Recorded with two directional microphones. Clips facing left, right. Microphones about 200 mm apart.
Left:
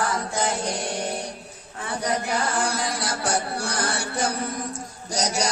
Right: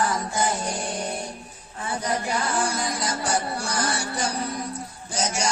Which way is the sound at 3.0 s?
65° left (ahead or behind).